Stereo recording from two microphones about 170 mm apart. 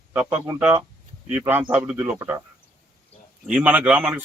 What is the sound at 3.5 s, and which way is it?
Speech, 10° right (ahead or behind).